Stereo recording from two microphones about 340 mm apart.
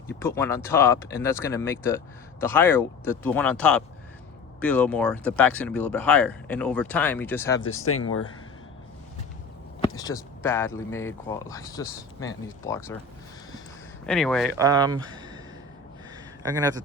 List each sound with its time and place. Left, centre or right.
0.1 s speech: centre
7.6 s speech: left
9.8 s speech: centre
14.1 s speech: centre
14.6 s speech: centre
16.4 s speech: centre